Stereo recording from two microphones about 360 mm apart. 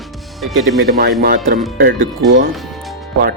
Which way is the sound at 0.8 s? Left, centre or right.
Right.